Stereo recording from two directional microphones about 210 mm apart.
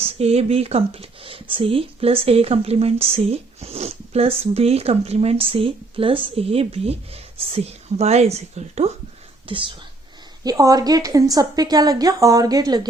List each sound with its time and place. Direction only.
0.0 s a woman's voice: 30° right (ahead or behind)